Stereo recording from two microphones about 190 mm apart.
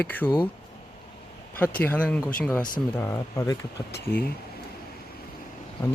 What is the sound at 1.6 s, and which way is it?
Speech, 10° left (ahead or behind).